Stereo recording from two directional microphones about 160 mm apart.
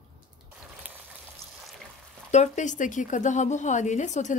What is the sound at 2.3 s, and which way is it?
A woman's voice, 50° left (ahead or behind).